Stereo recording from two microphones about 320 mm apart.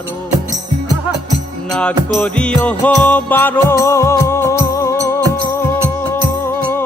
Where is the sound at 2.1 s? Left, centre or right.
Centre.